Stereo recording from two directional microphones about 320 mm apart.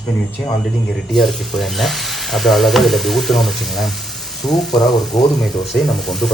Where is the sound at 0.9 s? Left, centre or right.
Centre.